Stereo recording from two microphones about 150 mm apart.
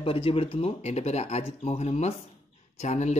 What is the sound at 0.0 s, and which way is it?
Speech, 40° left (ahead or behind).